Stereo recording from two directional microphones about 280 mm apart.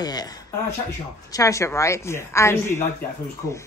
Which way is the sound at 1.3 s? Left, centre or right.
Centre.